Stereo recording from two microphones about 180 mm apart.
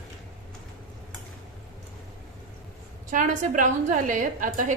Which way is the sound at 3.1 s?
45° right (ahead or behind).